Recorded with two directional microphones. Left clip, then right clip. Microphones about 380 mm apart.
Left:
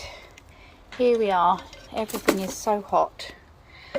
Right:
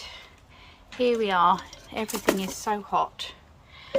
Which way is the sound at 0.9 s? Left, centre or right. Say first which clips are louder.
Left 3 dB; centre.